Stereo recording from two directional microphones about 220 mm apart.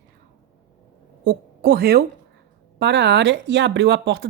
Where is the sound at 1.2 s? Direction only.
50° right (ahead or behind).